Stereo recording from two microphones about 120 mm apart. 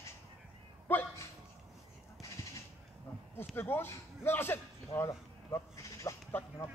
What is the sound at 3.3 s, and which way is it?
A man's voice, 20° left (ahead or behind).